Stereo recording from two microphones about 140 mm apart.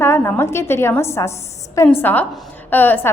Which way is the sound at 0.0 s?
15° left (ahead or behind).